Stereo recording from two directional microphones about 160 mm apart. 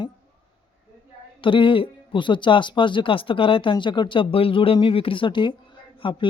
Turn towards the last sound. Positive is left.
turn(degrees=30)  # may be behind; listen again after turning